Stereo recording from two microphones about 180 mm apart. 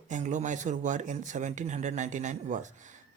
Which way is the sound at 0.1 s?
45° right (ahead or behind).